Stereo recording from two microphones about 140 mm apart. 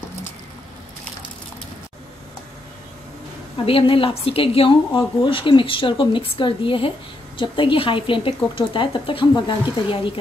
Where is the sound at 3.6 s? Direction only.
40° left (ahead or behind).